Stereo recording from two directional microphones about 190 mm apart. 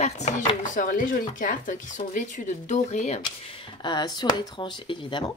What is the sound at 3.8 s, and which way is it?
Speech, 25° left (ahead or behind).